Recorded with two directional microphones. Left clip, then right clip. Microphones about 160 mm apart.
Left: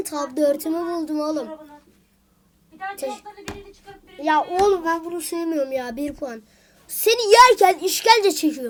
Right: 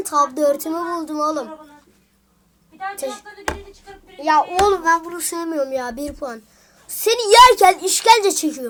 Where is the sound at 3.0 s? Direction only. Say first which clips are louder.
Even; 10° left (ahead or behind).